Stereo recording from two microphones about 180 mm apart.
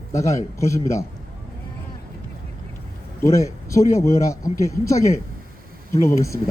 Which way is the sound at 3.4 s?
15° left (ahead or behind).